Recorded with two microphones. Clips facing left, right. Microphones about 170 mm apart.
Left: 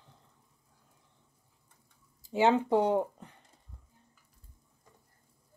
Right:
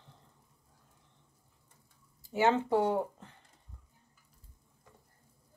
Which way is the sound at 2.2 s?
15° left (ahead or behind).